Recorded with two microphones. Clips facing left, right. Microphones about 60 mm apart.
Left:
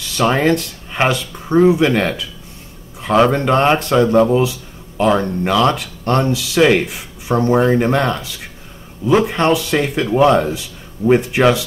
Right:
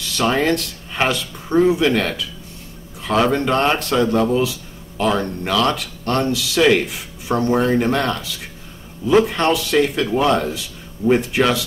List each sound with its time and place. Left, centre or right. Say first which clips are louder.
0.2 s speech: left 3 dB; centre
3.0 s a sound: left 5 dB; left
3.3 s speech: left 3 dB; centre